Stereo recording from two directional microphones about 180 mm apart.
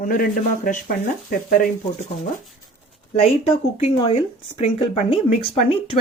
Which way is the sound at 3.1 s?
35° left (ahead or behind).